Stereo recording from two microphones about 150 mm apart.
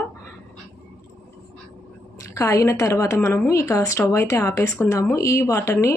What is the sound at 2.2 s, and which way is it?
Speech, 20° left (ahead or behind).